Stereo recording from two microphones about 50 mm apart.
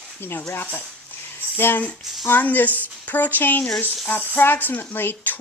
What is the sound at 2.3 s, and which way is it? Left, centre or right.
Speech, left.